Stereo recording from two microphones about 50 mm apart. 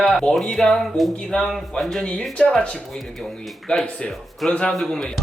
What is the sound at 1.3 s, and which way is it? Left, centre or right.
Speech, centre.